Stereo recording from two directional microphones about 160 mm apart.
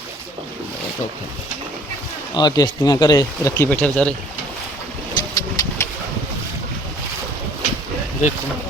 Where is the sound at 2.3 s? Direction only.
25° left (ahead or behind); by 4.1 s 10° left (ahead or behind).